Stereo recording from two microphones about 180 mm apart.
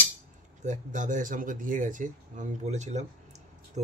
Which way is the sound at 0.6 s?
45° right (ahead or behind).